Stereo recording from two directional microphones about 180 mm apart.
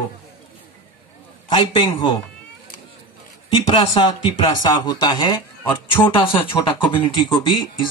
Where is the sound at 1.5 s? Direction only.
25° left (ahead or behind).